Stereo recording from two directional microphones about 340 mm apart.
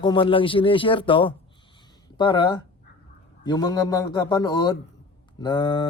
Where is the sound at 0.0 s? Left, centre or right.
Centre.